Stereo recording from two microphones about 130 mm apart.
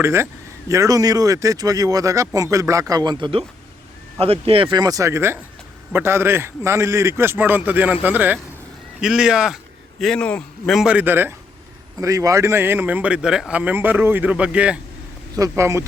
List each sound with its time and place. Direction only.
0.0 s a man's voice: 20° right (ahead or behind); by 9.6 s 5° right (ahead or behind)
10.0 s a man's voice: 5° left (ahead or behind)
10.8 s speech: 10° right (ahead or behind)
15.4 s speech: 20° right (ahead or behind)